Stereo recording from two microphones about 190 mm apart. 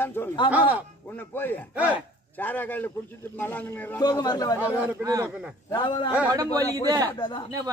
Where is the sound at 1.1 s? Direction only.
10° left (ahead or behind).